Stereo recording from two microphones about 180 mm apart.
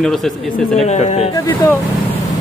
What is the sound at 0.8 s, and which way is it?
Speech, 40° left (ahead or behind).